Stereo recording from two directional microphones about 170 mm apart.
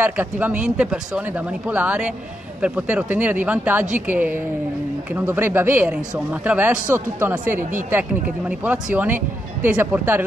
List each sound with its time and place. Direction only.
0.0 s speech: 10° right (ahead or behind)
8.9 s speech: 10° right (ahead or behind)